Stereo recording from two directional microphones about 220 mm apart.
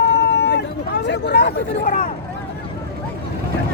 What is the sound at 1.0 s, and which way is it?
Speech, 50° left (ahead or behind).